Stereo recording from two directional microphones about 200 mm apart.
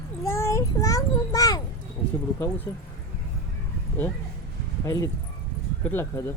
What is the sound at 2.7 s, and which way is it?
Speech, 15° left (ahead or behind).